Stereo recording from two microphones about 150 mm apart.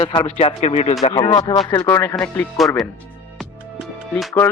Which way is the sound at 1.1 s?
30° left (ahead or behind).